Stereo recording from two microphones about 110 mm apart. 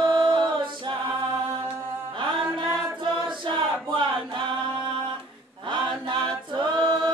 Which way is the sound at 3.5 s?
45° right (ahead or behind).